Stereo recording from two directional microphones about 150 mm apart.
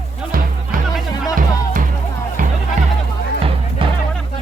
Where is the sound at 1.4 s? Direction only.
65° right (ahead or behind).